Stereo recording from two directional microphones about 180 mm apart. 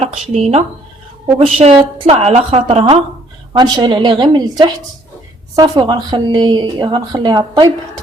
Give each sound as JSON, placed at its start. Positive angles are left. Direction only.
{"t": 0.0, "sound": "a woman's voice", "side_deg": -35}